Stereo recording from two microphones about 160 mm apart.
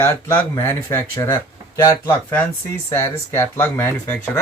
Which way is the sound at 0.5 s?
15° left (ahead or behind).